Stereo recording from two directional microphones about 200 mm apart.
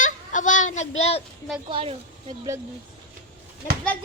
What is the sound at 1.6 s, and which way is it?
Speech, 25° right (ahead or behind).